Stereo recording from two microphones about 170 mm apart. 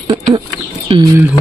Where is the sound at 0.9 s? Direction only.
35° right (ahead or behind).